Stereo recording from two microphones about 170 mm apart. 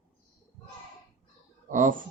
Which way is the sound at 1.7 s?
50° right (ahead or behind).